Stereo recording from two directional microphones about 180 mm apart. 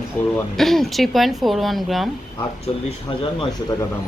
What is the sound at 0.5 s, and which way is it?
Speech, centre (ahead or behind).